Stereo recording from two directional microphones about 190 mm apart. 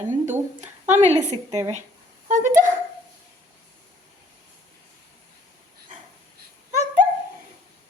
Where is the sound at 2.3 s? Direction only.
45° right (ahead or behind).